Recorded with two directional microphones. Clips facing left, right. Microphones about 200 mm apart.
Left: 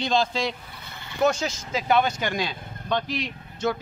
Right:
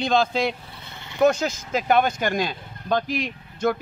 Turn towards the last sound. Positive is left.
turn(degrees=-50)  # may be behind; listen again after turning